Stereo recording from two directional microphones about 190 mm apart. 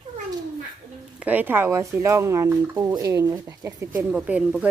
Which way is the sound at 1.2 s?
10° right (ahead or behind).